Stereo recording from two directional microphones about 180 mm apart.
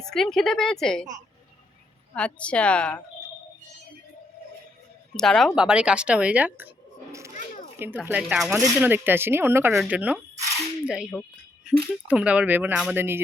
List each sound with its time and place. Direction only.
0.0 s a woman's voice: 5° left (ahead or behind)
2.1 s a woman's voice: 5° left (ahead or behind)
5.1 s speech: 5° left (ahead or behind); by 7.3 s 15° right (ahead or behind)
7.3 s children playing: 45° left (ahead or behind)
7.8 s a woman's voice: 10° right (ahead or behind)